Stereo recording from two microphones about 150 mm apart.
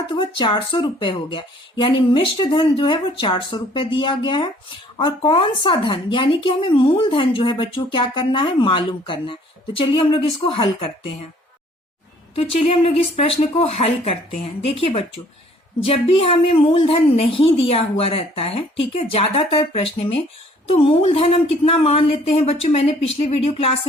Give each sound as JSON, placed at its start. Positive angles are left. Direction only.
{"t": 0.1, "sound": "speech", "side_deg": 30}
{"t": 12.3, "sound": "speech", "side_deg": 40}